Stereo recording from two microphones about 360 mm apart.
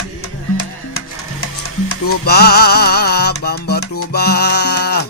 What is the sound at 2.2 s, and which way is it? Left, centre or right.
Music, left.